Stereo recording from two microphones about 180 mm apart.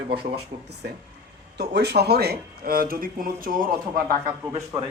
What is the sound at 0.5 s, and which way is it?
Speech, 45° right (ahead or behind).